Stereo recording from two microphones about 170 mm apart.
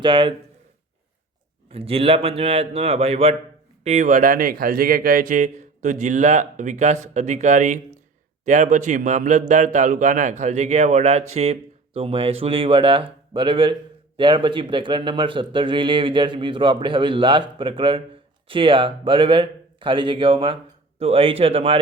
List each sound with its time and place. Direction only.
0.0 s a man's voice: 30° right (ahead or behind)
1.7 s speech: 35° right (ahead or behind)
3.8 s a man's voice: 45° right (ahead or behind)